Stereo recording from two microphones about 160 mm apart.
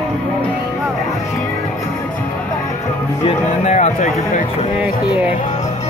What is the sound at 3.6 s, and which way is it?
Speech, 45° left (ahead or behind).